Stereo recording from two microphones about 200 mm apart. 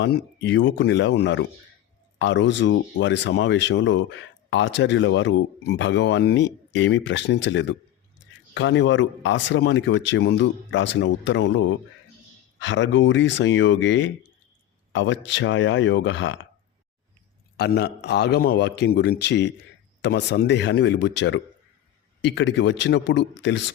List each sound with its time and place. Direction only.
0.0 s speech: 60° left (ahead or behind)
17.6 s speech: 55° left (ahead or behind)